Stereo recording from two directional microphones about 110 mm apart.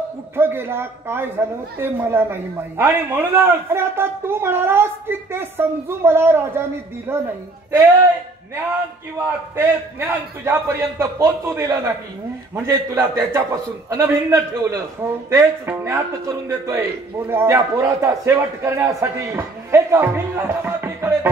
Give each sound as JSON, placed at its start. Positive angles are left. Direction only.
{"t": 0.4, "sound": "a woman's voice", "side_deg": -20}
{"t": 9.2, "sound": "a woman's voice", "side_deg": -20}